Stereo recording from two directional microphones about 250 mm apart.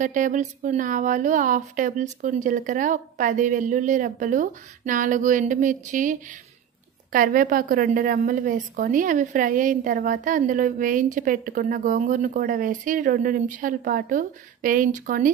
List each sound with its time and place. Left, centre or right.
0.0 s a woman's voice: right